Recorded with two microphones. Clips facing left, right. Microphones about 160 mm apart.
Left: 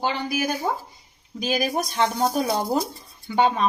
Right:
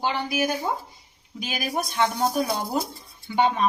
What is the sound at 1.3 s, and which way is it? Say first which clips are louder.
Speech: left 5 dB; 40° left (ahead or behind).